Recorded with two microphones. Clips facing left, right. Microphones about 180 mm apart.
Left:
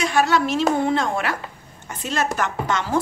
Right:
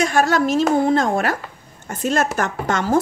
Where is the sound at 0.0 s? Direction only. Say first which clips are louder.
Right 2 dB; 45° right (ahead or behind).